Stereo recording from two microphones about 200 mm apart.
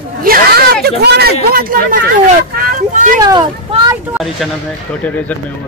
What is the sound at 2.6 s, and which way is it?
Speech, 45° right (ahead or behind).